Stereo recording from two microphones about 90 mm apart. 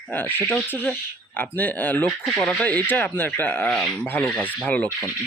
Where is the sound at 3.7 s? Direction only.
5° left (ahead or behind).